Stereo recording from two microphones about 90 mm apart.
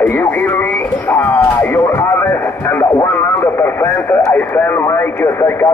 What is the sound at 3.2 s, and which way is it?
Radio, 25° left (ahead or behind).